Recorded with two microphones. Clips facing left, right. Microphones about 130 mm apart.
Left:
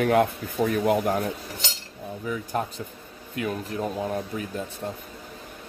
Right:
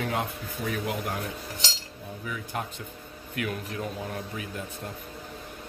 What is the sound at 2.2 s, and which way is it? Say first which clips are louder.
Speech: left 6 dB; 40° left (ahead or behind).